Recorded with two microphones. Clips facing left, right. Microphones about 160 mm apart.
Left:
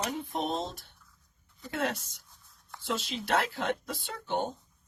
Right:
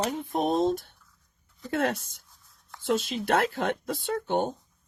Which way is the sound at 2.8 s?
50° right (ahead or behind).